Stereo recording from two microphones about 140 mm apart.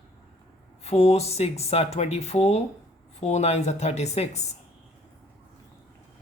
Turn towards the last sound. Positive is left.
turn(degrees=50)  # may be behind; listen again after turning